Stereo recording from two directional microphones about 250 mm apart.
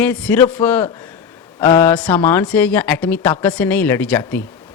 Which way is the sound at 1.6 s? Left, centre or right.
Centre.